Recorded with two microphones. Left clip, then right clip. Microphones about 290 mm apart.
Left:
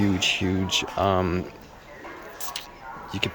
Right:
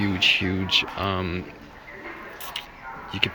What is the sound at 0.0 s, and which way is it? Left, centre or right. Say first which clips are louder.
Speech: right 3 dB; centre.